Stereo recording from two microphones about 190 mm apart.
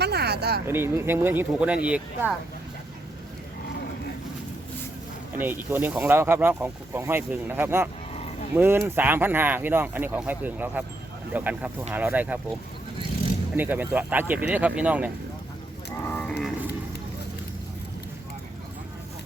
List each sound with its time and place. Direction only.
0.0 s a sound: 60° right (ahead or behind)
0.7 s speech: 10° right (ahead or behind)
5.4 s speech: 10° right (ahead or behind)
13.6 s speech: 10° right (ahead or behind)
16.0 s cattle: 5° left (ahead or behind)